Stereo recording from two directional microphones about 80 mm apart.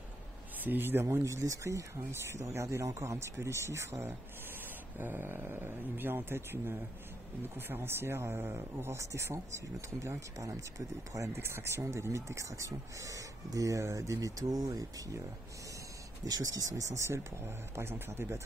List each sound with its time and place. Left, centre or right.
0.7 s speech: right
1.1 s speech: right
16.3 s speech: right